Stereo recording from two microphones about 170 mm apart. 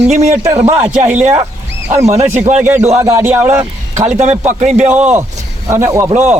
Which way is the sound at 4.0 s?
40° right (ahead or behind).